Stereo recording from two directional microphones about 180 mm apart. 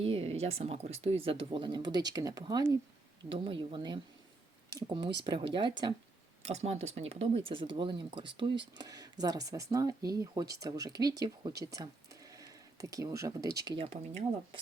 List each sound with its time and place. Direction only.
0.0 s speech: 30° right (ahead or behind)
6.4 s speech: 35° right (ahead or behind); by 13.8 s 20° right (ahead or behind)
13.8 s speech: 35° right (ahead or behind)